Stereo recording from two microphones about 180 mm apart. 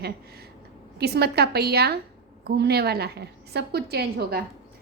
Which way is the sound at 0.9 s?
65° right (ahead or behind).